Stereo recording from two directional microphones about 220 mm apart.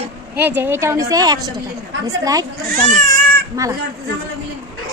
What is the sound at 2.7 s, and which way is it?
Speech, 35° right (ahead or behind).